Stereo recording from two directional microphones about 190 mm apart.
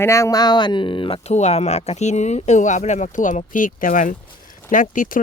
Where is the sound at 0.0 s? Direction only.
15° left (ahead or behind).